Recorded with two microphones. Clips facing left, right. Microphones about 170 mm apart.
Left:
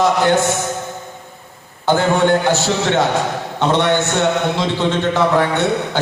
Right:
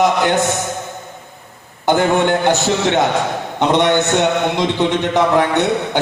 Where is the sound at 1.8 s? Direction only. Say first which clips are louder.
Even; 20° right (ahead or behind).